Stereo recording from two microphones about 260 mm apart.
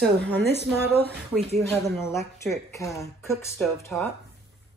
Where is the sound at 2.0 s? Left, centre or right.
Centre.